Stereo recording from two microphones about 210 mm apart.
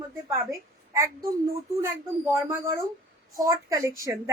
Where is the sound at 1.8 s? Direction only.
10° right (ahead or behind).